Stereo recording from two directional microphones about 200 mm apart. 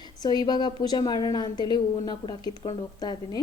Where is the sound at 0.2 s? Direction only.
20° left (ahead or behind).